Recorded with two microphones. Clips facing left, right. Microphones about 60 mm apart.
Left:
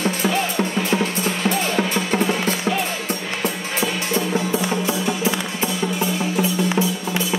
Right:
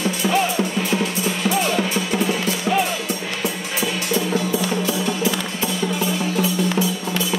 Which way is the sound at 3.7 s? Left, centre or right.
Left.